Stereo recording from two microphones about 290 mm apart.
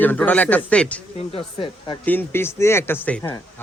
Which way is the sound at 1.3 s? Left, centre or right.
Centre.